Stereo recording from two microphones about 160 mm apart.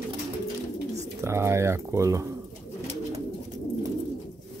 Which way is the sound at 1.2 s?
15° right (ahead or behind).